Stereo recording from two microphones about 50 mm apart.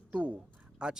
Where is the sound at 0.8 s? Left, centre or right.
Centre.